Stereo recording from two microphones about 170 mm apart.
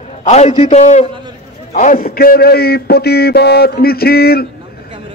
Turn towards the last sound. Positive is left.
turn(degrees=65)  # may be behind; listen again after turning